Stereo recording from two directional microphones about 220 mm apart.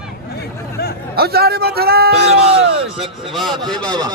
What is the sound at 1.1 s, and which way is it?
A man's voice, 45° right (ahead or behind).